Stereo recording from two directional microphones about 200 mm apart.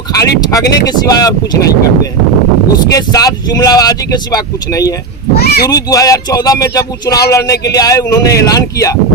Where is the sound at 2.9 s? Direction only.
20° left (ahead or behind).